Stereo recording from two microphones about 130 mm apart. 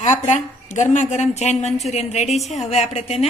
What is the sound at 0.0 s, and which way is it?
A woman's voice, 70° left (ahead or behind).